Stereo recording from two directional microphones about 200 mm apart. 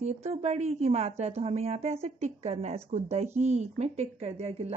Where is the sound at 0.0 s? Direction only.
35° right (ahead or behind).